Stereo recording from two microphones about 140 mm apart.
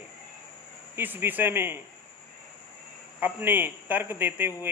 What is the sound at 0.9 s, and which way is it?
Speech, 15° right (ahead or behind).